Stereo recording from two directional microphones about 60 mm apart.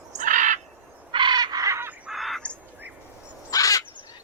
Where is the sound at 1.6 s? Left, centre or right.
Right.